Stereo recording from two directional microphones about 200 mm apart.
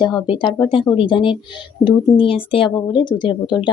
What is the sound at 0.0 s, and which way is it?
Speech, 25° left (ahead or behind).